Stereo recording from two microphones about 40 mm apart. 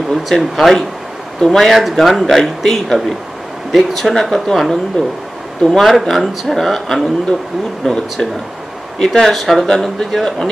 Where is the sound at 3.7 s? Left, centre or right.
Centre.